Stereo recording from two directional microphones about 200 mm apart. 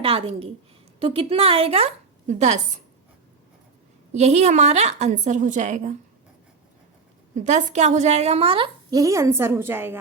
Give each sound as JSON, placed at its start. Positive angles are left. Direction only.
{"t": 0.0, "sound": "a woman's voice", "side_deg": -30}
{"t": 4.1, "sound": "a woman's voice", "side_deg": -35}
{"t": 7.3, "sound": "a woman's voice", "side_deg": -35}